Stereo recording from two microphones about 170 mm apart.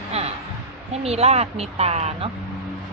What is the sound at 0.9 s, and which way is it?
Speech, 40° right (ahead or behind).